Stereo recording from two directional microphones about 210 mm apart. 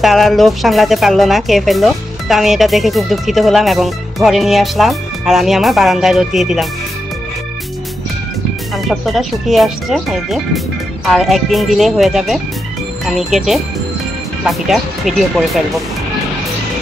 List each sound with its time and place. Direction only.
0.0 s speech: centre (ahead or behind)
8.7 s speech: centre (ahead or behind)